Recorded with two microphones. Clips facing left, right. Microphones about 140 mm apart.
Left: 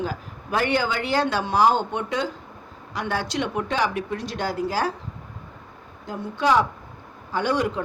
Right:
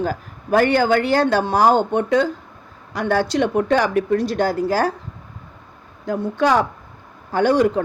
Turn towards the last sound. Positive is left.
turn(degrees=-45)  # may be behind; listen again after turning